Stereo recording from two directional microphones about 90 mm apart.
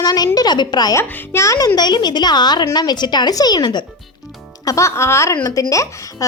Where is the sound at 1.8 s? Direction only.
55° left (ahead or behind).